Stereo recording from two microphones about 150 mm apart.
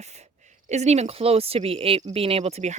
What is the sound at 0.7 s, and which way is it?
A woman's voice, 50° right (ahead or behind).